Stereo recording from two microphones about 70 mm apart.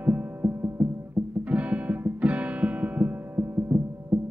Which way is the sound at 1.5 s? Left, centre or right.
Centre.